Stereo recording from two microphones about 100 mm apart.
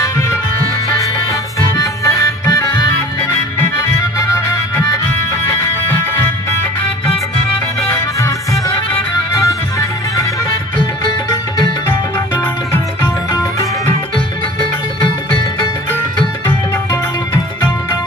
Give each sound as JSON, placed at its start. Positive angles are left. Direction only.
{"t": 0.9, "sound": "music", "side_deg": 35}
{"t": 3.2, "sound": "music", "side_deg": 20}
{"t": 4.2, "sound": "music", "side_deg": 30}
{"t": 6.1, "sound": "music", "side_deg": 25}
{"t": 7.9, "sound": "music", "side_deg": 30}
{"t": 13.3, "sound": "music", "side_deg": 35}
{"t": 16.5, "sound": "music", "side_deg": 25}